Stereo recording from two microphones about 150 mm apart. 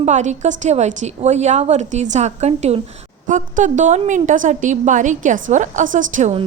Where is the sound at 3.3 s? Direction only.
60° right (ahead or behind).